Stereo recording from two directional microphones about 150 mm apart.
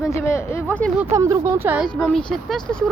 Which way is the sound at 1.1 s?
20° right (ahead or behind).